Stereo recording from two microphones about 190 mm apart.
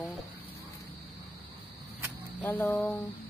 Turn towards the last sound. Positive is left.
turn(degrees=5)  # may be behind; listen again after turning